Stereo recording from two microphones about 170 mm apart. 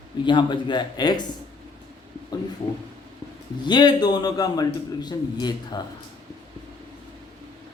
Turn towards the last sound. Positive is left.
turn(degrees=25)  # may be behind; listen again after turning